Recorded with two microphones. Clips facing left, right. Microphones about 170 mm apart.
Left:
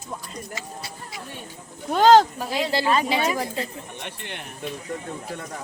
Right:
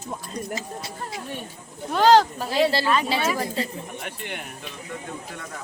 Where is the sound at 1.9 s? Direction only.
45° left (ahead or behind).